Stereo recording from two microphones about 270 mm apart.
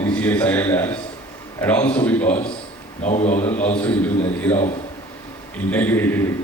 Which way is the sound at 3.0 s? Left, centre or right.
Left.